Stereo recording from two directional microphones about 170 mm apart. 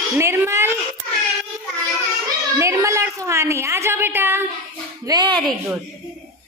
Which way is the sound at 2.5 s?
15° right (ahead or behind).